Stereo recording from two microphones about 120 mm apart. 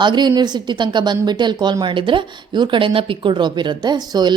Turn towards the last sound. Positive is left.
turn(degrees=-35)  # may be behind; listen again after turning